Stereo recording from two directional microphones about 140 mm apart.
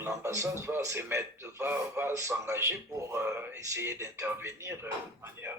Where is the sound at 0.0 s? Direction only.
20° right (ahead or behind).